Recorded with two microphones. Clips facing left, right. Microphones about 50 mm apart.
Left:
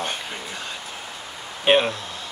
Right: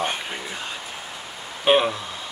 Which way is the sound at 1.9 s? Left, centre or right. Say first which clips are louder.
Right 1 dB; centre.